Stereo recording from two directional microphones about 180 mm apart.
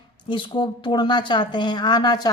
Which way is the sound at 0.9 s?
25° left (ahead or behind).